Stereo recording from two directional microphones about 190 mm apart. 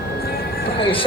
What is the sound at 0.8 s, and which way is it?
Speech, 25° left (ahead or behind).